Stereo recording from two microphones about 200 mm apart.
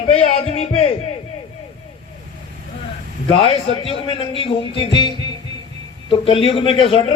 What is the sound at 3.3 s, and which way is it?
A man's voice, 30° left (ahead or behind).